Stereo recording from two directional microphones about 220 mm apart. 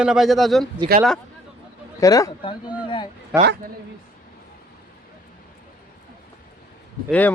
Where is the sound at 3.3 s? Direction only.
5° right (ahead or behind).